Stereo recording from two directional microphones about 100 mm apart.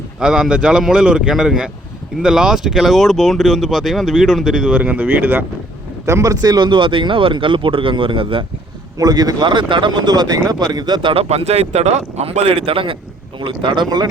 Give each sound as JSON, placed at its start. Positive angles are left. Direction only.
{"t": 0.2, "sound": "speech", "side_deg": -5}
{"t": 6.1, "sound": "speech", "side_deg": -30}
{"t": 9.0, "sound": "speech", "side_deg": -40}
{"t": 11.1, "sound": "speech", "side_deg": -75}